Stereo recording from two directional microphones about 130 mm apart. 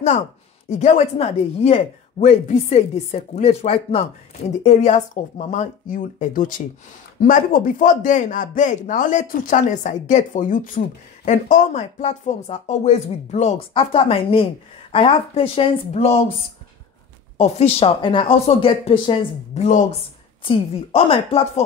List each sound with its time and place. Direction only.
0.7 s a man's voice: 60° left (ahead or behind); by 10.8 s 90° left
11.2 s speech: 70° left (ahead or behind)
12.0 s speech: 60° left (ahead or behind)
13.7 s speech: 45° left (ahead or behind)
17.4 s speech: 55° left (ahead or behind)
20.4 s speech: 45° left (ahead or behind)